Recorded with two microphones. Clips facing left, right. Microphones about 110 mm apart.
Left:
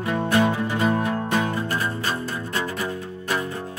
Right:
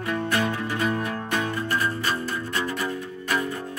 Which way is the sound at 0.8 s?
30° left (ahead or behind).